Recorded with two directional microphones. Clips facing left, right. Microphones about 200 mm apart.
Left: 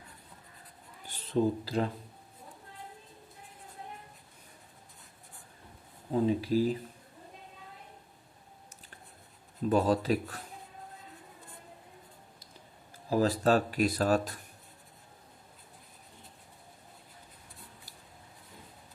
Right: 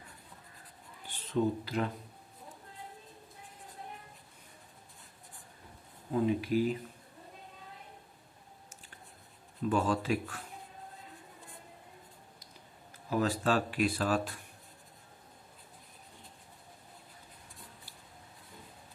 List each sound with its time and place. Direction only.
1.0 s speech: 40° left (ahead or behind)
6.1 s speech: 30° left (ahead or behind)
9.6 s speech: 35° left (ahead or behind)
13.1 s speech: 35° left (ahead or behind)